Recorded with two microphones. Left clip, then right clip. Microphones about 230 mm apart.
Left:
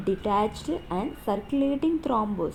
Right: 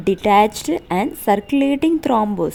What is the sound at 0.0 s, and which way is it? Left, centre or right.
A woman's voice, right.